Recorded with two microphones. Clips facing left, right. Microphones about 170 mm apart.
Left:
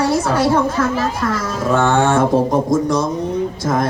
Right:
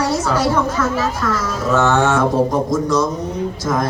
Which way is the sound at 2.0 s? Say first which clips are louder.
Left 1 dB; 55° left (ahead or behind).